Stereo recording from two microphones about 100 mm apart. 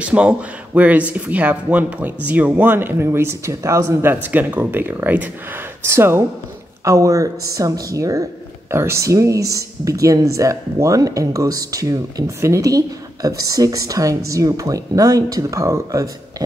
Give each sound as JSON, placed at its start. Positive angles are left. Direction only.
{"t": 0.0, "sound": "speech", "side_deg": -10}
{"t": 4.1, "sound": "speech", "side_deg": -20}